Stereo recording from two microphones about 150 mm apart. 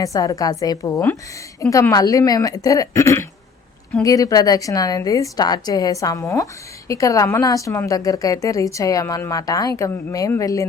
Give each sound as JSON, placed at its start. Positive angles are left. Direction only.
{"t": 0.0, "sound": "a woman's voice", "side_deg": 25}